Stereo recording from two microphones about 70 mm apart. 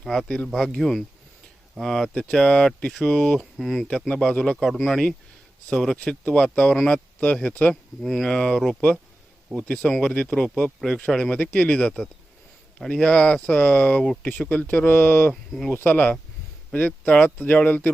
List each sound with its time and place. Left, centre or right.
0.0 s speech: centre
8.0 s speech: centre
9.6 s speech: centre
15.3 s speech: centre
15.7 s speech: left